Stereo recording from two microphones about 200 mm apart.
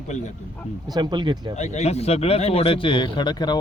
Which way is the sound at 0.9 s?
20° right (ahead or behind).